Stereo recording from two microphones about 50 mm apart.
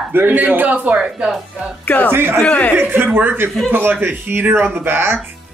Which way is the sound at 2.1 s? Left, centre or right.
Right.